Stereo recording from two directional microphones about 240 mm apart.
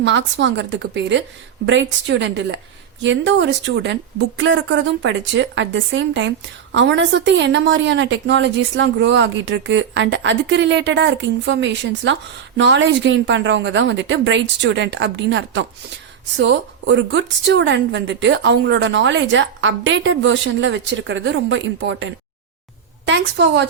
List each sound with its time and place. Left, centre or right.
0.0 s a woman's voice: right